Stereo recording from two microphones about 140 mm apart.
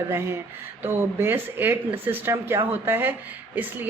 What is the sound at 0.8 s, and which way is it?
Speech, 15° right (ahead or behind).